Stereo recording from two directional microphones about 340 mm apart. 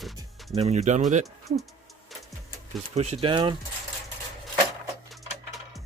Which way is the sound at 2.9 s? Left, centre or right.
Centre.